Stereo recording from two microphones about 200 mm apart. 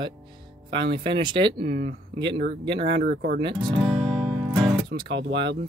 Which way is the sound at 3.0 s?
55° right (ahead or behind).